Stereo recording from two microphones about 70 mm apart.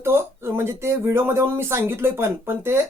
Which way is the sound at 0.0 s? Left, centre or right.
Right.